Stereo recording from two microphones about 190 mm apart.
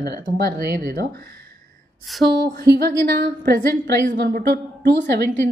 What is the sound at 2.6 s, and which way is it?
A woman's voice, 60° right (ahead or behind).